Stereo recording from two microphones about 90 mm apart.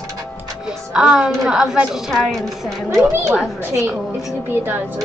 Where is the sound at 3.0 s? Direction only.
30° right (ahead or behind).